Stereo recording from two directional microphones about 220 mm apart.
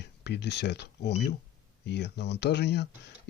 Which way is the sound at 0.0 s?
50° left (ahead or behind).